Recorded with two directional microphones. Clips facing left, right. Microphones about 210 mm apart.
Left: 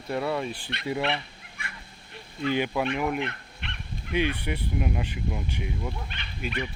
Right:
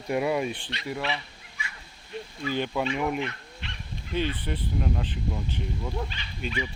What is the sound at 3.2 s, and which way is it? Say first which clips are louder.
Dog: even; 60° left (ahead or behind).